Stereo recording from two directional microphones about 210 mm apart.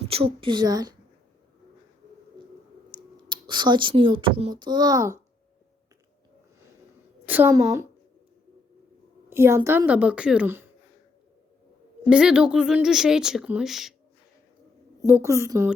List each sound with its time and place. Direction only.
0.1 s a woman's voice: 25° right (ahead or behind)
2.9 s speech: 20° right (ahead or behind)
7.3 s a woman's voice: 10° right (ahead or behind)
9.3 s a woman's voice: 10° right (ahead or behind)
12.0 s a woman's voice: 5° right (ahead or behind)
15.0 s a woman's voice: 10° right (ahead or behind)